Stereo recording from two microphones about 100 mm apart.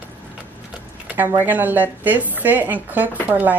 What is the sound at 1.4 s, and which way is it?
A woman's voice, 15° right (ahead or behind).